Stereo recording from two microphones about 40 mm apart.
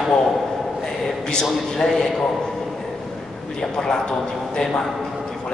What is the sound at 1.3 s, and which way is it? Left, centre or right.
Speech, centre.